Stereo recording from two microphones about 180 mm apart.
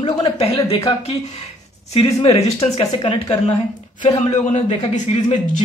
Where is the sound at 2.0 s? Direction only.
35° left (ahead or behind).